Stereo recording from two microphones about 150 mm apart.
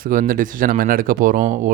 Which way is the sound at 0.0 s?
65° right (ahead or behind).